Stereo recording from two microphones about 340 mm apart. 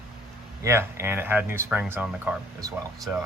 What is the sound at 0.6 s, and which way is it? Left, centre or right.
Speech, centre.